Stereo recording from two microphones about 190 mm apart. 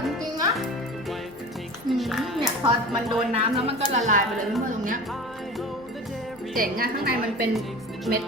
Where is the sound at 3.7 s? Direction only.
35° right (ahead or behind).